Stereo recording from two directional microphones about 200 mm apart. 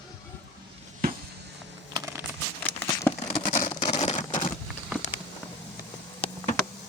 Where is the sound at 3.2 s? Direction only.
35° left (ahead or behind).